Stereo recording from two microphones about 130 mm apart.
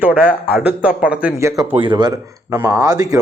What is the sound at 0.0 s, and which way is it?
Speech, 10° right (ahead or behind).